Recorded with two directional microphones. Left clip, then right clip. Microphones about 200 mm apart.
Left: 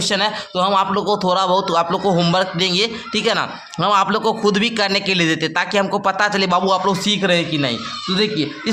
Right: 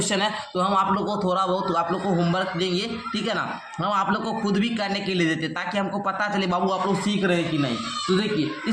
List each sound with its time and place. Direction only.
0.0 s a man's voice: 20° left (ahead or behind)
0.5 s a man's voice: 30° left (ahead or behind)